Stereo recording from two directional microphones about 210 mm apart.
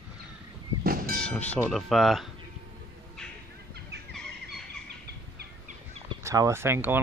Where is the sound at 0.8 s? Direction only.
45° right (ahead or behind).